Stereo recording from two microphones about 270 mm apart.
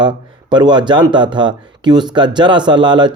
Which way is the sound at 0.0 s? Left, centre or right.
Centre.